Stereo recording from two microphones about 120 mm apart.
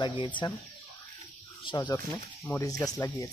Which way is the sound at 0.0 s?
45° left (ahead or behind).